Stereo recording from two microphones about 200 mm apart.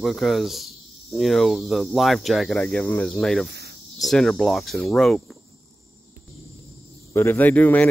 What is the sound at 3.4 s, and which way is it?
Cricket, 55° right (ahead or behind).